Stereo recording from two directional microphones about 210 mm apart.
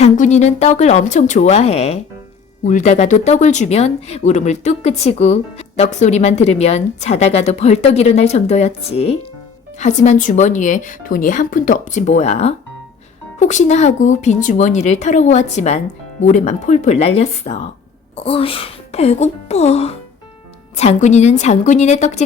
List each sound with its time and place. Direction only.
0.0 s speech: 35° left (ahead or behind)